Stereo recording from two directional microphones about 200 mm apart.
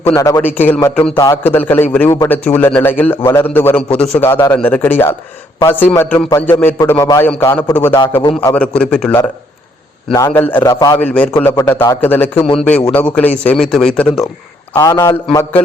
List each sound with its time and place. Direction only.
0.1 s a man's voice: 15° left (ahead or behind)
10.1 s a man's voice: 15° left (ahead or behind)
11.0 s a man's voice: 5° left (ahead or behind)
11.3 s a man's voice: 20° left (ahead or behind)
14.7 s a man's voice: 15° left (ahead or behind)